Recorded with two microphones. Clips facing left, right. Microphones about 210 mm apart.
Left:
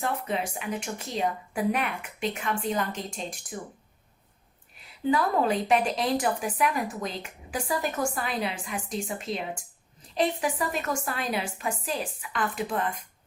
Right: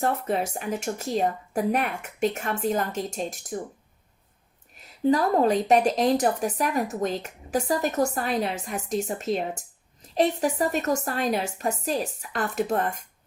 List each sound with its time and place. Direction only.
0.0 s a woman's voice: 45° right (ahead or behind)
4.8 s a woman's voice: 40° right (ahead or behind)